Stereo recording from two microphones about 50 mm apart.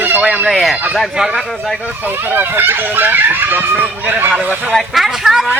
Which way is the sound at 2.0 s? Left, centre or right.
Right.